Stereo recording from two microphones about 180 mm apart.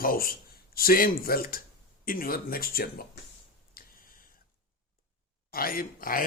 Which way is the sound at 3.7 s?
50° left (ahead or behind).